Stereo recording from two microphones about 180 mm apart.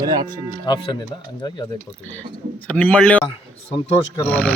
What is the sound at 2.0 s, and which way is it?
Speech, 10° left (ahead or behind).